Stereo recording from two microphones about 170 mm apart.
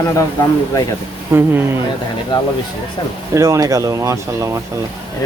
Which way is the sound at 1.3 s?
15° right (ahead or behind).